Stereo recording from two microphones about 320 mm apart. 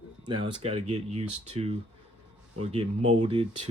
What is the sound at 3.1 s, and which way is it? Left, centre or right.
Speech, centre.